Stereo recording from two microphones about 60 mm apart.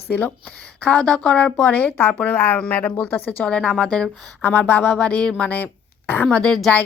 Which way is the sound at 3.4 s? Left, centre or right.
Centre.